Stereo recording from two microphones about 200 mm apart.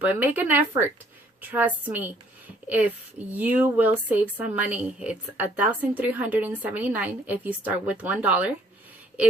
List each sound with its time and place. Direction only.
0.0 s a woman's voice: 10° right (ahead or behind)